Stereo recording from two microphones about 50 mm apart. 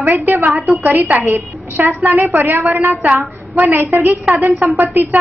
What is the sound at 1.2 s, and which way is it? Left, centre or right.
A woman's voice, right.